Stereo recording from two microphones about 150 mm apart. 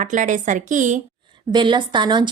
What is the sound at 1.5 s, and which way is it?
Speech, 30° right (ahead or behind).